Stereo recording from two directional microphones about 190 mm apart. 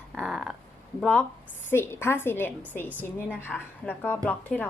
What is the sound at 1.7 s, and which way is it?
A woman's voice, 10° left (ahead or behind).